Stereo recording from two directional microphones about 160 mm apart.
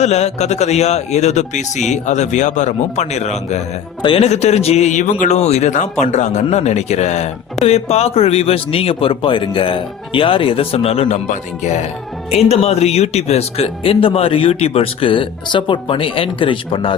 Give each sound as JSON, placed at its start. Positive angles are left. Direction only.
{"t": 0.0, "sound": "speech", "side_deg": 45}